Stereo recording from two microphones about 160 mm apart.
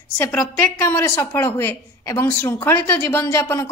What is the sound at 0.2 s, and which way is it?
A woman's voice, 15° left (ahead or behind).